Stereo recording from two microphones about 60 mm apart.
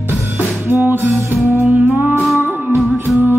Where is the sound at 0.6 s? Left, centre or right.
Right.